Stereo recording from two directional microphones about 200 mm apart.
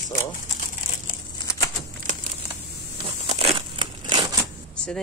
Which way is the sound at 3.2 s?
30° right (ahead or behind).